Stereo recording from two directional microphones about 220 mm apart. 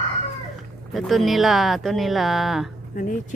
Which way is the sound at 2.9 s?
40° left (ahead or behind).